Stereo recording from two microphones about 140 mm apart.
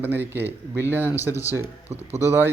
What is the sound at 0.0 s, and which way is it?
A man's voice, 15° right (ahead or behind).